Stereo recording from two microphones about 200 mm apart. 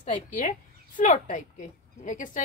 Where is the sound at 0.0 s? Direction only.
40° left (ahead or behind).